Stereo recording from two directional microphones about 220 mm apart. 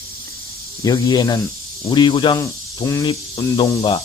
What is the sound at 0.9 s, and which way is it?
Speech, 20° left (ahead or behind).